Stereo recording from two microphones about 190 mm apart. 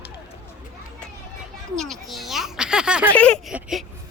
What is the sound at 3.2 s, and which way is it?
Speech, 5° left (ahead or behind).